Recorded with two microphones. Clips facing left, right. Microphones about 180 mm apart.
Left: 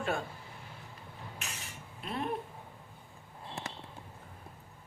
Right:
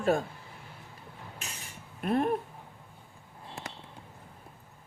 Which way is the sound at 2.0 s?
50° right (ahead or behind).